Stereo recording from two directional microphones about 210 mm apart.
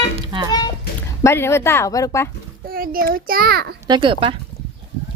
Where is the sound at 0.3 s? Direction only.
20° right (ahead or behind).